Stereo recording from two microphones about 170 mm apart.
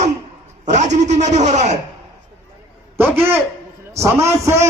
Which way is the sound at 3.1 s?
10° right (ahead or behind).